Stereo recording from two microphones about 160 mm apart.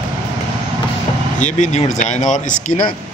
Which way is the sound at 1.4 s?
50° left (ahead or behind).